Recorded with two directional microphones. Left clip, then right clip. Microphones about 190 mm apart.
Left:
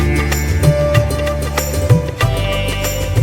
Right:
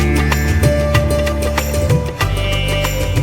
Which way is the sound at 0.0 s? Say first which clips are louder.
Right 1 dB; centre (ahead or behind).